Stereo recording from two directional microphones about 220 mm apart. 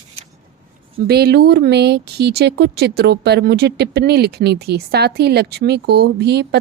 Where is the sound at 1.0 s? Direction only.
45° right (ahead or behind).